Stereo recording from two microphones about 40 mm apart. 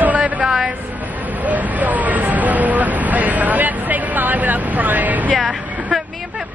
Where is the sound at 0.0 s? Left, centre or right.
Right.